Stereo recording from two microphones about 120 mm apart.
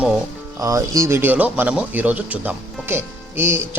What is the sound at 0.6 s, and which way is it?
Speech, 25° right (ahead or behind).